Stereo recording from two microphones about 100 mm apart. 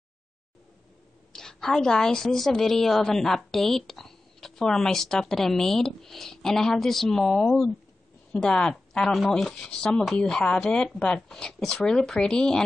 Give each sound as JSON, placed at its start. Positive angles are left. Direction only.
{"t": 1.3, "sound": "a woman's voice", "side_deg": 5}